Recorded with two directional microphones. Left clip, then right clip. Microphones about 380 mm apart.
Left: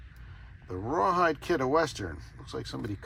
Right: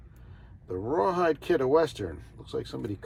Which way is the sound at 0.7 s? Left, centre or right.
Centre.